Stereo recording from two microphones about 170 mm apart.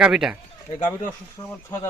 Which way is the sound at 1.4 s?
20° left (ahead or behind).